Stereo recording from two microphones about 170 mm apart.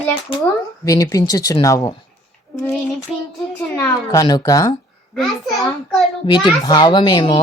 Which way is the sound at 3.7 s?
15° left (ahead or behind).